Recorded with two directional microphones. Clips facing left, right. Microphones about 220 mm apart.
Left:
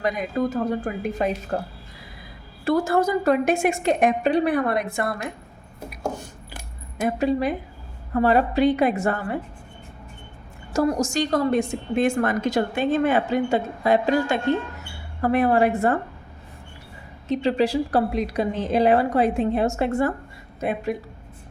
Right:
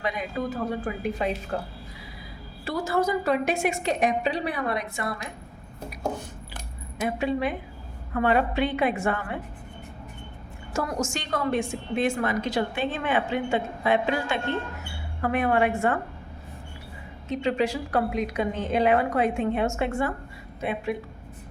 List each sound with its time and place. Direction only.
0.0 s a woman's voice: 45° left (ahead or behind)
2.6 s a woman's voice: 50° left (ahead or behind)
7.0 s a woman's voice: 40° left (ahead or behind)
10.7 s a woman's voice: 35° left (ahead or behind)
17.2 s a woman's voice: 35° left (ahead or behind)